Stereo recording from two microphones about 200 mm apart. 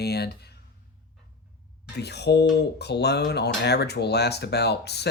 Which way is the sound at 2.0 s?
55° left (ahead or behind).